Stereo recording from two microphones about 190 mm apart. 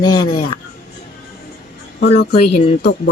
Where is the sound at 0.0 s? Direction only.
20° left (ahead or behind).